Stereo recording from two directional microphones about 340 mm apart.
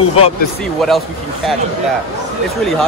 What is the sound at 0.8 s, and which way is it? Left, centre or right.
Speech, centre.